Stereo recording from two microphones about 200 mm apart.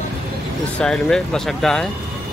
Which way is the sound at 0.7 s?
5° left (ahead or behind).